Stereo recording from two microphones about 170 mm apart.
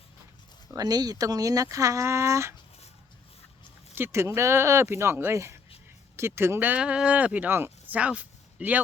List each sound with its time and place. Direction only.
0.7 s speech: 20° right (ahead or behind)
3.9 s speech: 15° right (ahead or behind)